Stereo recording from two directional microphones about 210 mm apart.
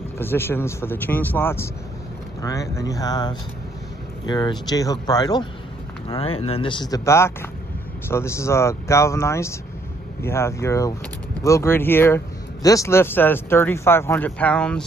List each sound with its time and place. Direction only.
0.2 s speech: 10° left (ahead or behind)